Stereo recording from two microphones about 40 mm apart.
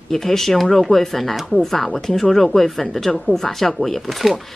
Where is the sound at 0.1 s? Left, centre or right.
Centre.